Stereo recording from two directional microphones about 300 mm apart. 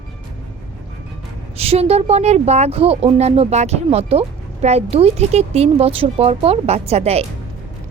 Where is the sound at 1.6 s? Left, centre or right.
Centre.